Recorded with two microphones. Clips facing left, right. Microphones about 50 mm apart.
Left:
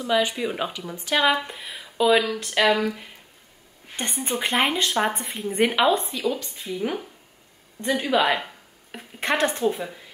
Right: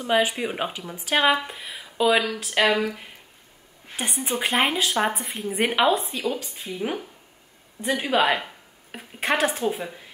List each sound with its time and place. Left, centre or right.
0.1 s speech: right
0.5 s a woman's voice: centre
1.3 s speech: centre
6.1 s a woman's voice: centre